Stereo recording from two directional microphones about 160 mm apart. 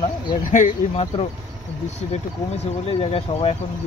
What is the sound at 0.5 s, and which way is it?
Speech, 50° left (ahead or behind).